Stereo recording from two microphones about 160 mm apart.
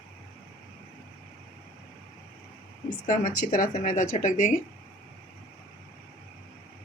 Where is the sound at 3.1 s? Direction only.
60° left (ahead or behind).